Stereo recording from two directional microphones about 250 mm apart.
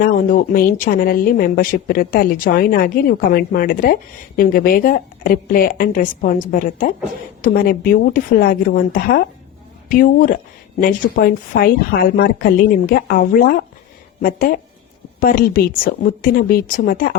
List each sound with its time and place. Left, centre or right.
0.0 s speech: left